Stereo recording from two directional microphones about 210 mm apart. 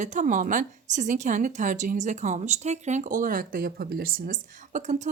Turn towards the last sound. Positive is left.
turn(degrees=-40)  # may be behind; listen again after turning